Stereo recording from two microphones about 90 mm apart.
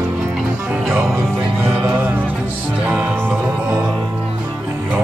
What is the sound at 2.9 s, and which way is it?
Music, 15° right (ahead or behind).